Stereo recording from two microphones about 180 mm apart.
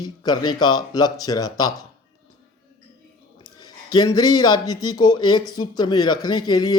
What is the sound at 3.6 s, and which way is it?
A man's voice, 20° left (ahead or behind).